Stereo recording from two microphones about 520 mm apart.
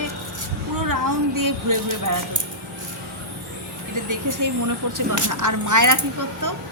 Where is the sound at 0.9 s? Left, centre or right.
Right.